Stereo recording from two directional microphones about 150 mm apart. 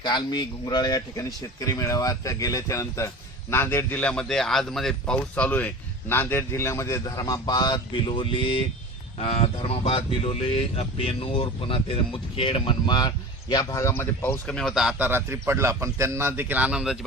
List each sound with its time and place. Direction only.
0.0 s speech: 30° left (ahead or behind); by 17.0 s 5° right (ahead or behind)